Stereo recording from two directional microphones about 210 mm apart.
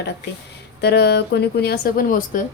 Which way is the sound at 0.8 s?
50° left (ahead or behind).